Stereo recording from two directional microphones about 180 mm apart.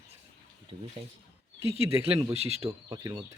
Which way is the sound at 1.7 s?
35° right (ahead or behind).